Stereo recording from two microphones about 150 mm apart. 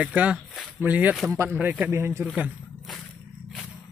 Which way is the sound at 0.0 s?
10° right (ahead or behind).